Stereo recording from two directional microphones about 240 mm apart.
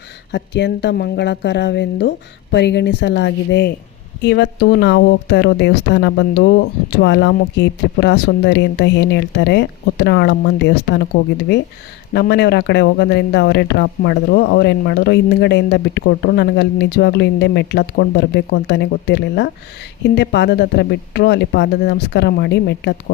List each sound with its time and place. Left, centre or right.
0.3 s speech: left
12.1 s speech: left